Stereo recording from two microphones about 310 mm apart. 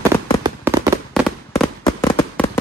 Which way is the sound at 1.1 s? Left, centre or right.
Centre.